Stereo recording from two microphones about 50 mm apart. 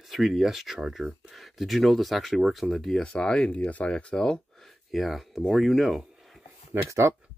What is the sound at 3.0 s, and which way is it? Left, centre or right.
Speech, centre.